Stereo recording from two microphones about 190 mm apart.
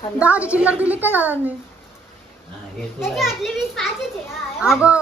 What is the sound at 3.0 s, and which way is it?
Speech, centre (ahead or behind).